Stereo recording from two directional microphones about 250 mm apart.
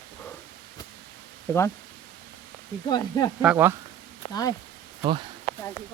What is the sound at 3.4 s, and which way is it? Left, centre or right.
Speech, centre.